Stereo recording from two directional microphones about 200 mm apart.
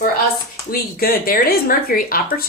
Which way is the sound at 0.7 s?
50° left (ahead or behind).